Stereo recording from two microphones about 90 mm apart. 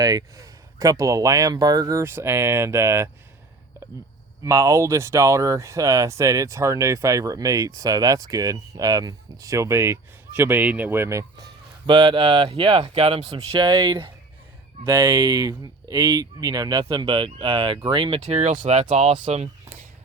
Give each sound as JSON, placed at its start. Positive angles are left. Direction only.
{"t": 0.0, "sound": "speech", "side_deg": -40}
{"t": 4.4, "sound": "speech", "side_deg": -35}
{"t": 11.9, "sound": "speech", "side_deg": -60}
{"t": 13.7, "sound": "speech", "side_deg": -55}